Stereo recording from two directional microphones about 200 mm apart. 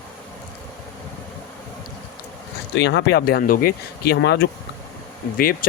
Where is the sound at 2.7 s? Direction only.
60° left (ahead or behind).